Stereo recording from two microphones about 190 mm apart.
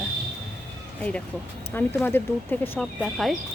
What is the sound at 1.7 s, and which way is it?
Speech, 10° left (ahead or behind).